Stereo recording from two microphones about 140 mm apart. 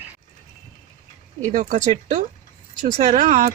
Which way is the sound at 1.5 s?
65° right (ahead or behind).